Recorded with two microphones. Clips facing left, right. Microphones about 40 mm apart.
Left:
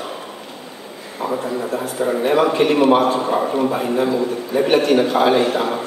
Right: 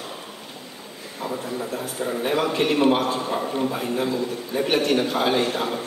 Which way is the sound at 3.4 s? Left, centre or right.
Left.